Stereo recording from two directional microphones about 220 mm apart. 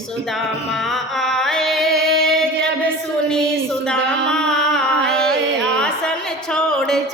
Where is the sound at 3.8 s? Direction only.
5° left (ahead or behind).